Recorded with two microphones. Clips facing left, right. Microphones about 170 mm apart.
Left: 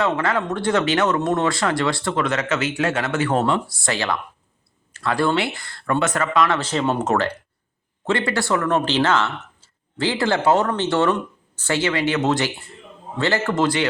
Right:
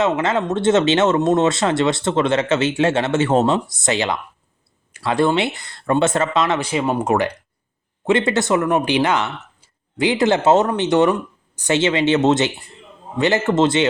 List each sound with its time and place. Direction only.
0.0 s speech: 20° right (ahead or behind)